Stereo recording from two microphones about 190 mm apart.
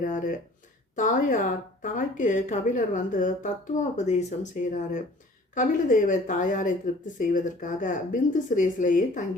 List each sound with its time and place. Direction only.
0.0 s speech: 45° left (ahead or behind)